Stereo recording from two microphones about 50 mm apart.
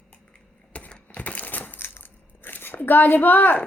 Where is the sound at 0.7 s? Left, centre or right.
Left.